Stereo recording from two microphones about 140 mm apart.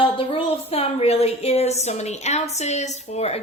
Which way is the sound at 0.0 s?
40° left (ahead or behind).